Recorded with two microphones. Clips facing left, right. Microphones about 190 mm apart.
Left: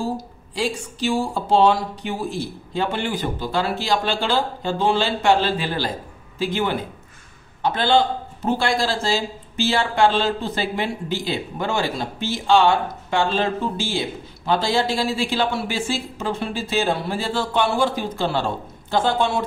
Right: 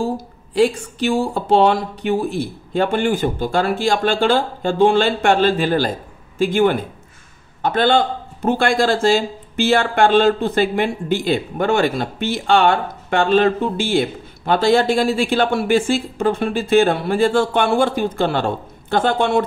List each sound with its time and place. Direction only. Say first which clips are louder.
0.6 s a man's voice: right 8 dB; 60° right (ahead or behind)